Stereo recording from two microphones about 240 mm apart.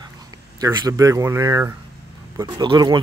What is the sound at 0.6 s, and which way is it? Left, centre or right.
Speech, centre.